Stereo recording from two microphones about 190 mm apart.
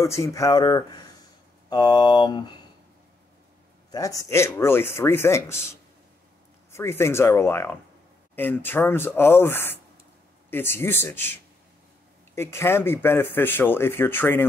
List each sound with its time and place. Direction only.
0.0 s speech: 15° left (ahead or behind)
3.9 s speech: 15° left (ahead or behind)
6.7 s speech: 15° left (ahead or behind)
12.4 s speech: 15° left (ahead or behind)